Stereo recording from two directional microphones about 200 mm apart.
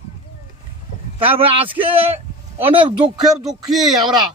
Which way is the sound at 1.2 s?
25° right (ahead or behind).